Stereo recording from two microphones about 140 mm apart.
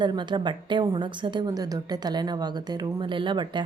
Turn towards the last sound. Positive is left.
turn(degrees=-35)  # may be behind; listen again after turning